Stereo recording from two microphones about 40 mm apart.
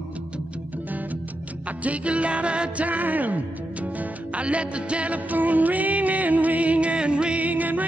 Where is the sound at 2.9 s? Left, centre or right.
Right.